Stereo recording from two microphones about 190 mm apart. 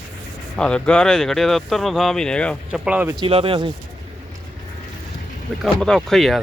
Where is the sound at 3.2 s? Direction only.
30° right (ahead or behind).